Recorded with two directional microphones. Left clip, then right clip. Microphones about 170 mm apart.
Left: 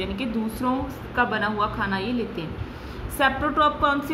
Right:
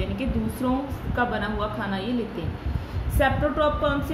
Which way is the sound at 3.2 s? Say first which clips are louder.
Left 2 dB; 25° left (ahead or behind).